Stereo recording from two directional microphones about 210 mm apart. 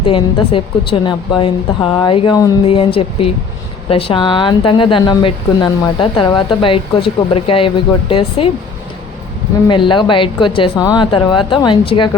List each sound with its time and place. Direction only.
0.0 s a woman's voice: 25° left (ahead or behind)
9.6 s a woman's voice: 20° left (ahead or behind)